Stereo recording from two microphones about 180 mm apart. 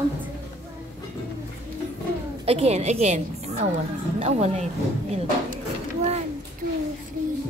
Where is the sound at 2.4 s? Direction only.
35° right (ahead or behind).